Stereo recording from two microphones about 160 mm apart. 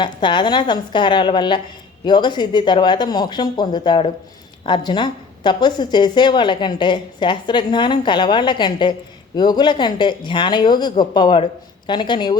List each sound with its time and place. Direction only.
0.0 s speech: 30° left (ahead or behind)